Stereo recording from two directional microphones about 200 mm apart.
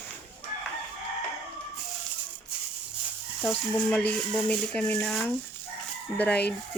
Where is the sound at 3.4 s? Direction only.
5° left (ahead or behind).